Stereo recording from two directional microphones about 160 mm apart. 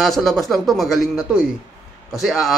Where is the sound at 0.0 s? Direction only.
Centre (ahead or behind).